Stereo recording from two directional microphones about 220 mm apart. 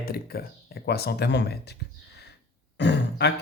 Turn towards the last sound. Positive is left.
turn(degrees=50)  # may be behind; listen again after turning